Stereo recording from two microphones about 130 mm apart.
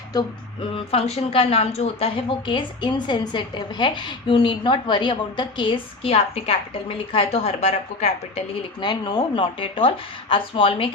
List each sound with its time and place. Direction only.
0.7 s speech: 50° left (ahead or behind)
2.5 s a woman's voice: 35° left (ahead or behind); by 8.4 s 55° left (ahead or behind)
8.8 s a woman's voice: 35° left (ahead or behind)